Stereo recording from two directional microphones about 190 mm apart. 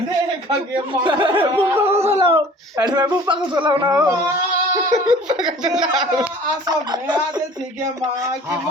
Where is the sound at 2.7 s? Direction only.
20° right (ahead or behind).